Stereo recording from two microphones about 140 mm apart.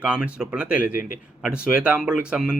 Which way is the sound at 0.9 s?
75° left (ahead or behind).